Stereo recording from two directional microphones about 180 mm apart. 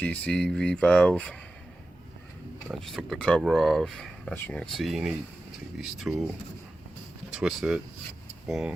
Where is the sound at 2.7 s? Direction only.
Centre (ahead or behind).